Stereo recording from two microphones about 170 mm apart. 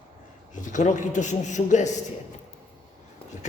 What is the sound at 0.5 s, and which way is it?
A man's voice, 50° left (ahead or behind).